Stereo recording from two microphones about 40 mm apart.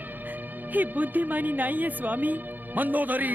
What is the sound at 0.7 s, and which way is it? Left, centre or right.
Speech, right.